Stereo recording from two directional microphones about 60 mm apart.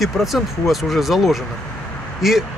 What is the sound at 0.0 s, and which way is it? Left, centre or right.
Speech, centre.